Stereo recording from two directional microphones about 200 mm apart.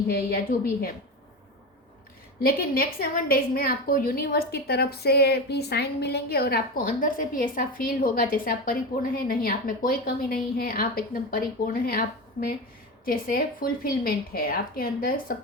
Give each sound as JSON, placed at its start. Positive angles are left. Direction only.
{"t": 0.1, "sound": "a woman's voice", "side_deg": 50}
{"t": 2.4, "sound": "a woman's voice", "side_deg": 50}
{"t": 13.1, "sound": "a woman's voice", "side_deg": 45}